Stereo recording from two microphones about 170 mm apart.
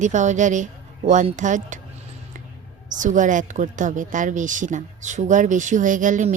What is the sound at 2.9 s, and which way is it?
A woman's voice, 50° right (ahead or behind).